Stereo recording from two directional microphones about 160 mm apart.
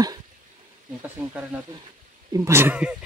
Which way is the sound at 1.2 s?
10° right (ahead or behind).